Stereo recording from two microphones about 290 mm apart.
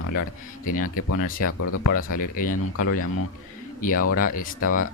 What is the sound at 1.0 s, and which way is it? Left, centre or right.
Speech, left.